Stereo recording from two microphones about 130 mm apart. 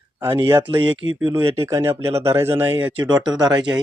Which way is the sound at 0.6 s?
40° right (ahead or behind).